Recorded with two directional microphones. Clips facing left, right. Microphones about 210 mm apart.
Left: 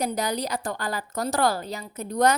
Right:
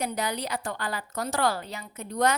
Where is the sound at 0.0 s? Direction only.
40° left (ahead or behind).